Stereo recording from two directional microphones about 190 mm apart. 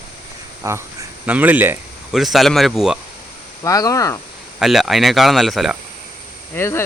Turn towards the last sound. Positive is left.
turn(degrees=15)  # may be behind; listen again after turning